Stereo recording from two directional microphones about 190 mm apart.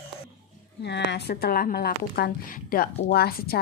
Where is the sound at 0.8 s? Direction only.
65° left (ahead or behind).